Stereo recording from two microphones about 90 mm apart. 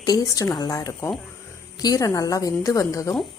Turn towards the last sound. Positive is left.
turn(degrees=35)  # may be behind; listen again after turning